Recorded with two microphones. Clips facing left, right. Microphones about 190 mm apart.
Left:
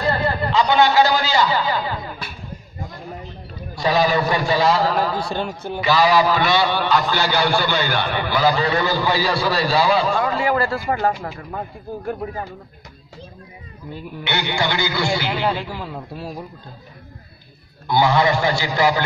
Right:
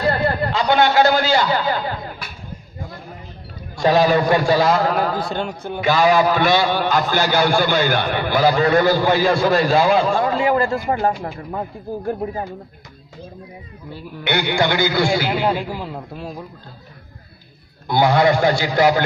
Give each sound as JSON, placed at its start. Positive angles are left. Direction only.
{"t": 0.1, "sound": "a man's voice", "side_deg": -55}
{"t": 3.7, "sound": "a man's voice", "side_deg": -50}
{"t": 10.9, "sound": "speech", "side_deg": -25}
{"t": 14.2, "sound": "a man's voice", "side_deg": -55}
{"t": 15.7, "sound": "a man's voice", "side_deg": -10}
{"t": 16.2, "sound": "a man's voice", "side_deg": 5}
{"t": 17.8, "sound": "a man's voice", "side_deg": -50}